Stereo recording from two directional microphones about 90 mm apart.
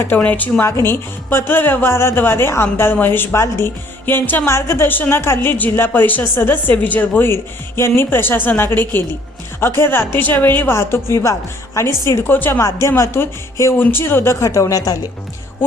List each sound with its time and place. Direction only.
0.2 s a woman's voice: 20° left (ahead or behind); by 14.9 s 40° left (ahead or behind)